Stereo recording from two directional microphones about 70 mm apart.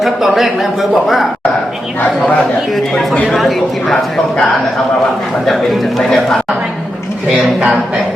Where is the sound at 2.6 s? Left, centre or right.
Centre.